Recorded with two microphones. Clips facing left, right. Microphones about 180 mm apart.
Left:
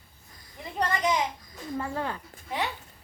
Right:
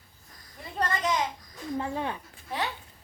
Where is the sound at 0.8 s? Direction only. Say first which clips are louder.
Left 2 dB; 15° left (ahead or behind).